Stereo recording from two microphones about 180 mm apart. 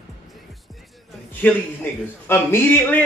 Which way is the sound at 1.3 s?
10° left (ahead or behind).